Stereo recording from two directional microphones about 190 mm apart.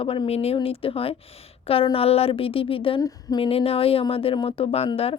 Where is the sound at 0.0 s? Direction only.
30° left (ahead or behind).